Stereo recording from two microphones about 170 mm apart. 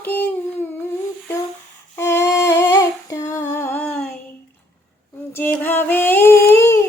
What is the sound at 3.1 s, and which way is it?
Female singing, 20° left (ahead or behind).